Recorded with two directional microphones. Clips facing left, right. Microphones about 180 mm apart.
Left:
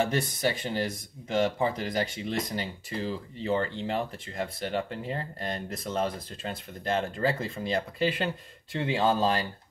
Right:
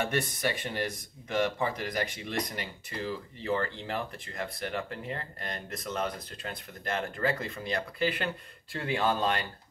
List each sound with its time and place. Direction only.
0.1 s speech: 25° left (ahead or behind)